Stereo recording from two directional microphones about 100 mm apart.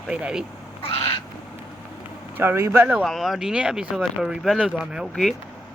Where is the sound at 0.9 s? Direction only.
70° left (ahead or behind).